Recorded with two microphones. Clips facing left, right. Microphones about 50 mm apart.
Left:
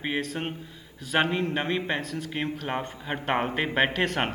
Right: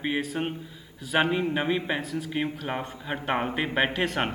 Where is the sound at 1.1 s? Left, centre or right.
Centre.